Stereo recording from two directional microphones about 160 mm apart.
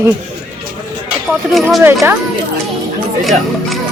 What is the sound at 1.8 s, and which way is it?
Speech, 15° right (ahead or behind).